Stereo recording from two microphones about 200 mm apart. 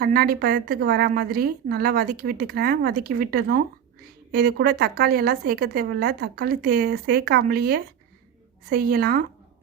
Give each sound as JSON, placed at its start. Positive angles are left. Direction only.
{"t": 0.0, "sound": "a woman's voice", "side_deg": -50}